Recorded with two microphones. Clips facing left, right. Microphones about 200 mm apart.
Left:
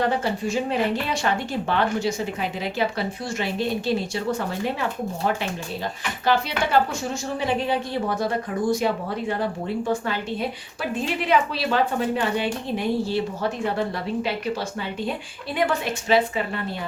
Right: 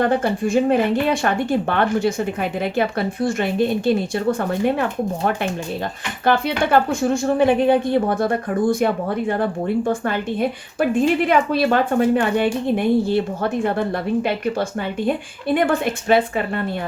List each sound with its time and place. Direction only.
0.0 s a woman's voice: 55° right (ahead or behind)